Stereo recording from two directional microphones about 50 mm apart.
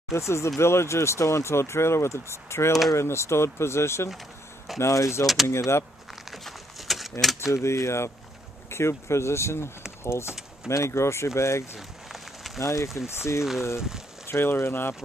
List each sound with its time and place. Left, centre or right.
0.1 s speech: left
4.7 s speech: left
5.2 s speech: centre
5.5 s speech: left
6.3 s a sound: centre
7.3 s speech: left
12.5 s speech: left
13.4 s speech: centre
14.2 s speech: left